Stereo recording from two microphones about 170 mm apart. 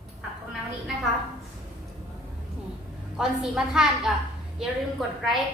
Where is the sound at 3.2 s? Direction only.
5° right (ahead or behind).